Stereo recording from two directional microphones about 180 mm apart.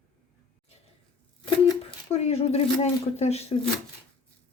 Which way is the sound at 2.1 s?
35° left (ahead or behind).